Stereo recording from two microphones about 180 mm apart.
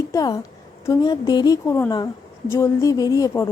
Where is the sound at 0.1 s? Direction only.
20° left (ahead or behind).